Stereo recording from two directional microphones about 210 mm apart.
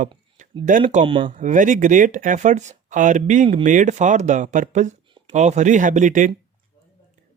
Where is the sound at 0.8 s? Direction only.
25° right (ahead or behind).